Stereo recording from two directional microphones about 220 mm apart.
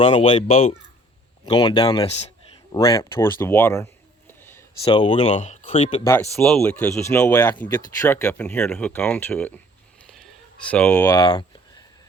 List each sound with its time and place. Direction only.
0.0 s speech: 25° left (ahead or behind)
2.7 s speech: 15° left (ahead or behind)
4.3 s a sound: 10° left (ahead or behind)
4.8 s speech: 25° left (ahead or behind)
6.1 s speech: 5° left (ahead or behind)
10.1 s a sound: centre (ahead or behind); by 11.8 s 20° left (ahead or behind)